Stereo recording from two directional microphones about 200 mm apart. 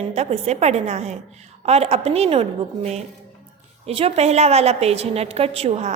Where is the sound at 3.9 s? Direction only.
30° right (ahead or behind).